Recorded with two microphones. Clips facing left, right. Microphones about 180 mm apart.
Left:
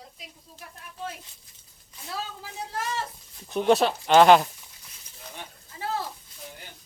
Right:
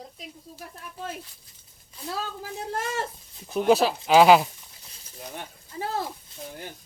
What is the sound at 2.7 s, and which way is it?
Speech, 50° right (ahead or behind).